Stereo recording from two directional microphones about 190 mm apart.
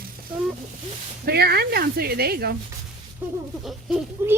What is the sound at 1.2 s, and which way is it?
Speech, 55° right (ahead or behind).